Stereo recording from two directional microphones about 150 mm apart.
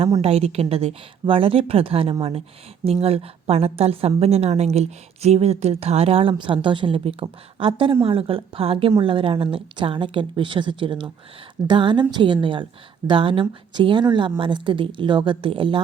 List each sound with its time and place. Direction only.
0.2 s a woman's voice: 45° right (ahead or behind)